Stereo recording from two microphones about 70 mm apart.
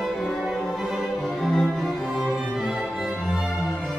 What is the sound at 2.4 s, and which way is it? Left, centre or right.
Music, centre.